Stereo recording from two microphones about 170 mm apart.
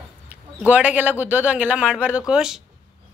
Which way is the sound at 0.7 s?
10° right (ahead or behind).